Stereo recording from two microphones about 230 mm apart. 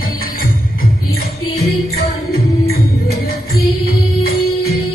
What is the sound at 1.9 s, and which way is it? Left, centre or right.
Music, left.